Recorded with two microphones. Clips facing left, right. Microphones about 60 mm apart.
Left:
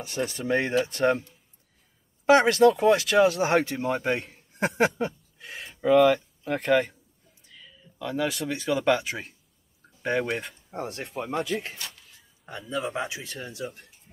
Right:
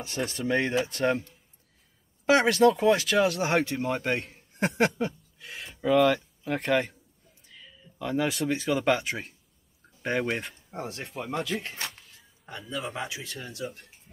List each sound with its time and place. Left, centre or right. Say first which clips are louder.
0.0 s speech: left 1 dB; centre
2.8 s speech: left 3 dB; left
5.8 s speech: left 3 dB; centre
12.2 s a sound: left 2 dB; centre
12.9 s speech: left 3 dB; centre